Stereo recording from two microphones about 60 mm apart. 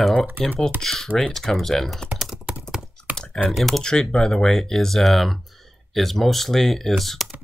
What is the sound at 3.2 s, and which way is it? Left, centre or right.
Speech, centre.